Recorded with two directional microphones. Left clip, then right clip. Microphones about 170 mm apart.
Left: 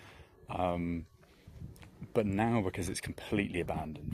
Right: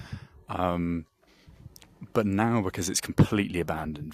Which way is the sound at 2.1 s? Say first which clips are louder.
Right 5 dB; 45° right (ahead or behind).